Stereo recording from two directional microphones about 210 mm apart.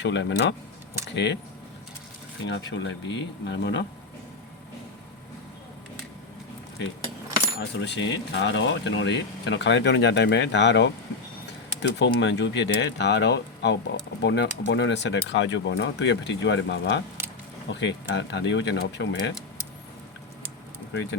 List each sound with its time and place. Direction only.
0.0 s speech: 55° left (ahead or behind)
2.4 s speech: 60° left (ahead or behind)
7.6 s speech: 55° left (ahead or behind)
20.9 s speech: 60° left (ahead or behind)